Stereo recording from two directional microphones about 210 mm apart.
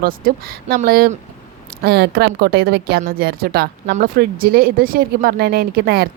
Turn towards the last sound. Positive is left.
turn(degrees=-45)  # may be behind; listen again after turning